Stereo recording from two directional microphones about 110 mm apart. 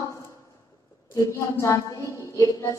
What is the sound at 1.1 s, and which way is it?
A woman's voice, 30° left (ahead or behind).